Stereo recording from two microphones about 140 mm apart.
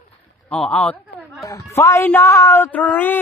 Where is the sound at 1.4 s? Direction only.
20° left (ahead or behind).